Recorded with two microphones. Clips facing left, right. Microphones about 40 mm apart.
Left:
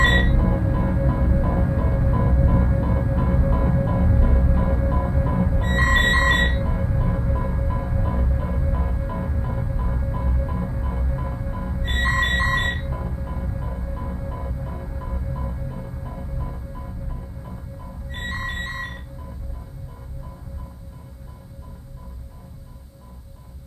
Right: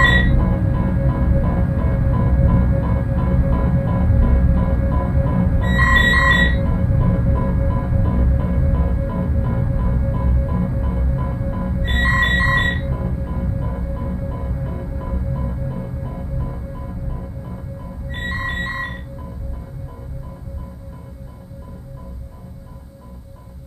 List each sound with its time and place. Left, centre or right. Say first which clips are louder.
0.0 s music: right 4 dB; right
6.7 s music: right 5 dB; centre
7.1 s music: right 5 dB; centre
12.9 s music: right 5 dB; centre